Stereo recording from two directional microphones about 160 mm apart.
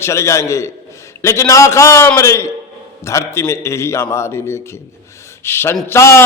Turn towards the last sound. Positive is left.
turn(degrees=15)  # may be behind; listen again after turning